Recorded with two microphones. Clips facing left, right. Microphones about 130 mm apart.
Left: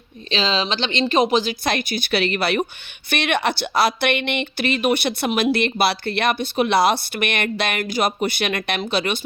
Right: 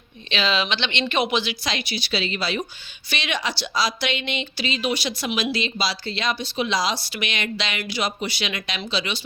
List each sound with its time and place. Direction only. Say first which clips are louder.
0.3 s speech: left 2 dB; 35° left (ahead or behind); by 9.2 s 55° left (ahead or behind)